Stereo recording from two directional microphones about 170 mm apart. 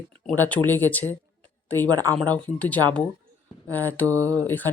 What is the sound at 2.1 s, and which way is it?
Speech, 10° left (ahead or behind).